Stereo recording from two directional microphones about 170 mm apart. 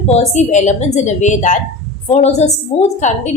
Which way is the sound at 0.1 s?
40° left (ahead or behind).